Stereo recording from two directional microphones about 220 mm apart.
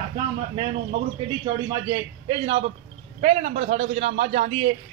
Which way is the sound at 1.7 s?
20° right (ahead or behind).